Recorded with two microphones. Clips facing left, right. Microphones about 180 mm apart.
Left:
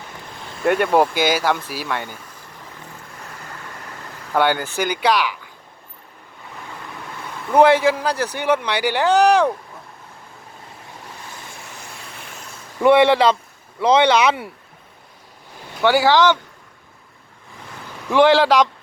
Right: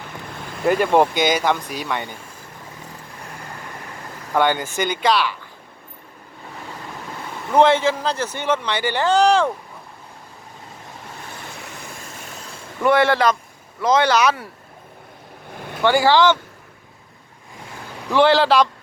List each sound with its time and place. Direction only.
0.6 s speech: centre (ahead or behind)
4.4 s speech: 10° left (ahead or behind)
7.5 s speech: 10° left (ahead or behind)
12.8 s speech: 20° left (ahead or behind)
15.8 s speech: 10° left (ahead or behind)
18.1 s speech: 10° left (ahead or behind)